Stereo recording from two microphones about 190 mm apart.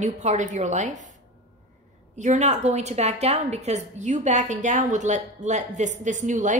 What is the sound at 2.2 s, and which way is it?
A woman's voice, 40° right (ahead or behind).